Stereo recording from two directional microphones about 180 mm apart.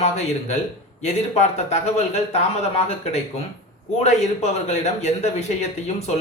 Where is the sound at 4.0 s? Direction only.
40° left (ahead or behind).